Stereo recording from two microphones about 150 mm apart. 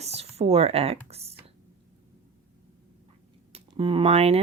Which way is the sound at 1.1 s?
45° right (ahead or behind).